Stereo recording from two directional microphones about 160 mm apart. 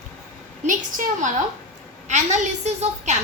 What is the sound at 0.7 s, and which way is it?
A woman's voice, 55° right (ahead or behind).